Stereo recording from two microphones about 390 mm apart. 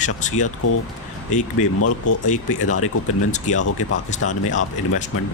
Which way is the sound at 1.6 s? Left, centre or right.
Left.